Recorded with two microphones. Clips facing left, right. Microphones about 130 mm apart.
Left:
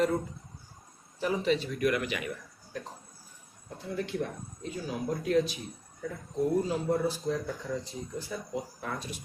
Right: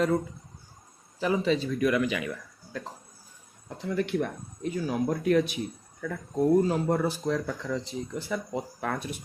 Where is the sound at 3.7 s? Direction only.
90° right; by 5.6 s 65° right (ahead or behind).